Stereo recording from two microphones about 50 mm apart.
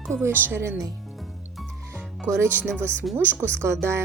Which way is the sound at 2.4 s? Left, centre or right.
Right.